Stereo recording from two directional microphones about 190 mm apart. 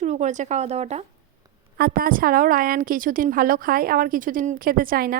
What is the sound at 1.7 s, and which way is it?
A woman's voice, 50° right (ahead or behind).